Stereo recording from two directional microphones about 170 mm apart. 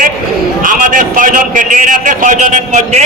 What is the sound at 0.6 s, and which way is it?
A man's voice, 50° right (ahead or behind).